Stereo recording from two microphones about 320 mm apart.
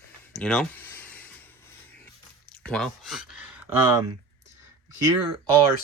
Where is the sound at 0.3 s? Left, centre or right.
Centre.